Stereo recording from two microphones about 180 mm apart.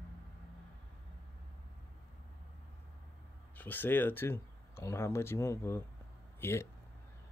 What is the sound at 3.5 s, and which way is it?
Speech, 10° left (ahead or behind).